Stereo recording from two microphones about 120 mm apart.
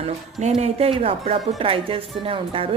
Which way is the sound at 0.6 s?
55° right (ahead or behind).